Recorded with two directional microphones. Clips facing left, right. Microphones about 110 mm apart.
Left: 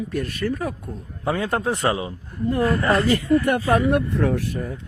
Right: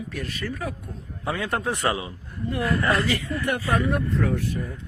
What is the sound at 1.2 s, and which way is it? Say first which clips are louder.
Speech: left 4 dB; 30° left (ahead or behind).